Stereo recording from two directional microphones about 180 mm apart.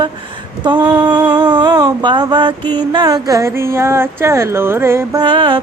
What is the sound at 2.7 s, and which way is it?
Speech, 25° right (ahead or behind).